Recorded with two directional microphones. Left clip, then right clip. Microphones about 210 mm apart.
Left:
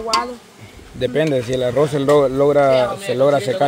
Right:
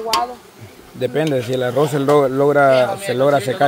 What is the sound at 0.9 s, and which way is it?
Speech, 5° left (ahead or behind).